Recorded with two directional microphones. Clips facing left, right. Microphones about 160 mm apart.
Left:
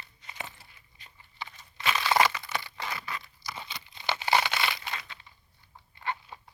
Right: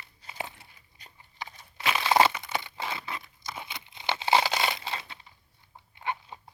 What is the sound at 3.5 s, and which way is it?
Tearing, 20° right (ahead or behind).